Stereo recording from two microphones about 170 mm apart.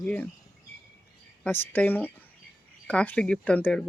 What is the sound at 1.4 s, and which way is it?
Speech, 10° left (ahead or behind).